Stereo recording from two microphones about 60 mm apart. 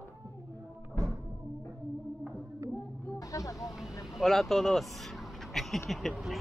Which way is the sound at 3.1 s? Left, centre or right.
Left.